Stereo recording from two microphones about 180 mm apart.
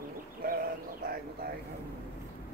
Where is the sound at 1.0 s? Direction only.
55° right (ahead or behind).